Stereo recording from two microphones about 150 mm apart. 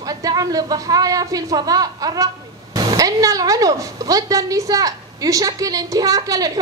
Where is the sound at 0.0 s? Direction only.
25° right (ahead or behind).